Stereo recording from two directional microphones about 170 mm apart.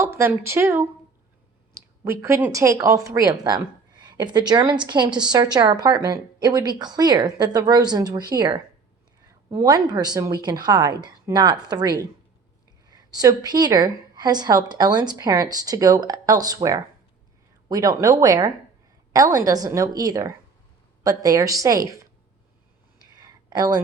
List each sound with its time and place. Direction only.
0.0 s speech: 15° right (ahead or behind)
2.0 s speech: 15° right (ahead or behind)
17.7 s speech: 20° right (ahead or behind)
23.2 s a sound: 25° right (ahead or behind)